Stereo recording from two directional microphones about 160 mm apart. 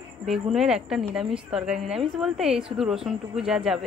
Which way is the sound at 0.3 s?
Centre (ahead or behind).